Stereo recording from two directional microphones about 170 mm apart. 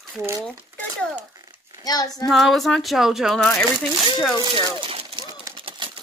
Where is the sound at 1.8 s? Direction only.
20° left (ahead or behind).